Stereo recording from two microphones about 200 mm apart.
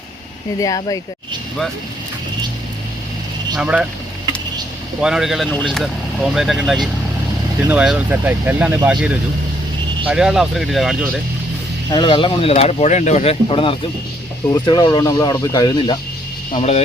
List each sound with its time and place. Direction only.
0.6 s speech: 15° left (ahead or behind)
3.5 s speech: 5° right (ahead or behind)
4.9 s speech: 5° right (ahead or behind)
11.9 s speech: 25° left (ahead or behind)